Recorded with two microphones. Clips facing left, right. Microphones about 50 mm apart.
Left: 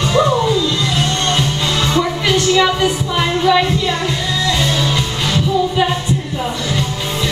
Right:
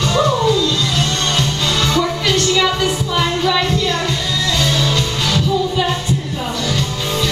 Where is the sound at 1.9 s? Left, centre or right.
Centre.